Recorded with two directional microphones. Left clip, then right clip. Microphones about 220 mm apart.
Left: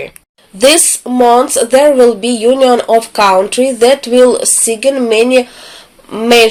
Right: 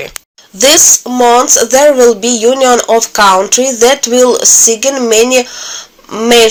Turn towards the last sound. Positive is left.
turn(degrees=-15)  # may be behind; listen again after turning